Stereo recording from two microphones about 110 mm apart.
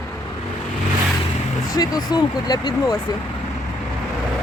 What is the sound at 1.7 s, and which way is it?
Speech, 35° left (ahead or behind).